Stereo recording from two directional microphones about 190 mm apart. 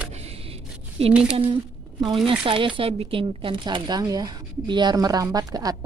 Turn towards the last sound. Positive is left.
turn(degrees=-20)  # may be behind; listen again after turning